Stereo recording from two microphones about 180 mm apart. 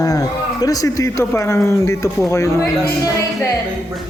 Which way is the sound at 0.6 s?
20° left (ahead or behind).